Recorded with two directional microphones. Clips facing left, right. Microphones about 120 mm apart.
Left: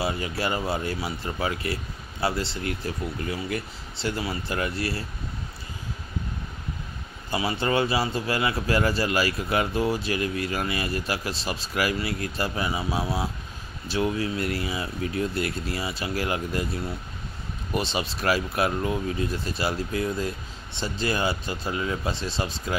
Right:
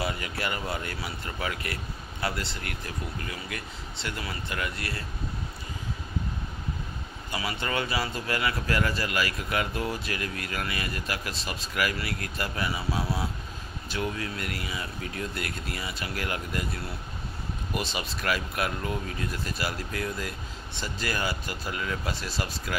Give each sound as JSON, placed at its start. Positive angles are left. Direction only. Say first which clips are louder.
{"t": 0.0, "sound": "speech", "louder": "left 4 dB", "side_deg": 30}
{"t": 7.2, "sound": "a man's voice", "louder": "left 6 dB", "side_deg": 30}
{"t": 17.7, "sound": "a man's voice", "louder": "left 6 dB", "side_deg": 30}